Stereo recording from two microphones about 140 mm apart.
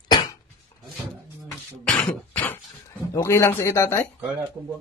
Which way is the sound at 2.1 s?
10° left (ahead or behind).